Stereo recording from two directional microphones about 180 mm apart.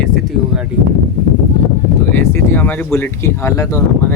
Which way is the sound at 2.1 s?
15° left (ahead or behind).